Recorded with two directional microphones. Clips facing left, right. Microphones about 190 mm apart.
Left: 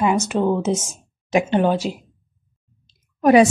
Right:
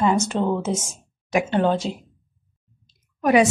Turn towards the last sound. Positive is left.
turn(degrees=30)  # may be behind; listen again after turning